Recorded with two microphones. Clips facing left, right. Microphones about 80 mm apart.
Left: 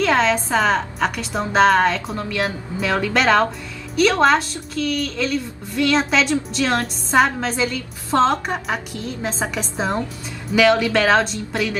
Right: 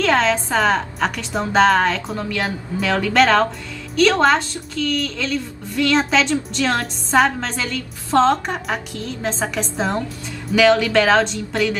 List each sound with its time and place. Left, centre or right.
0.0 s a woman's voice: centre
8.9 s a woman's voice: centre
9.4 s a woman's voice: centre